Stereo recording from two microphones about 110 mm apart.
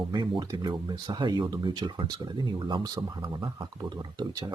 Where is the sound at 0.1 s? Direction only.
45° right (ahead or behind).